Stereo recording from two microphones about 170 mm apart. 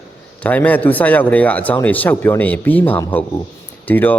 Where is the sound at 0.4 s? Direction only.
10° left (ahead or behind).